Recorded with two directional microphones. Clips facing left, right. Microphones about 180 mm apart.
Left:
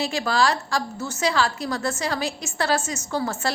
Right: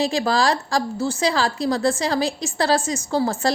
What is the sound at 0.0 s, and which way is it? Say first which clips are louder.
A woman's voice: right 3 dB; 35° right (ahead or behind).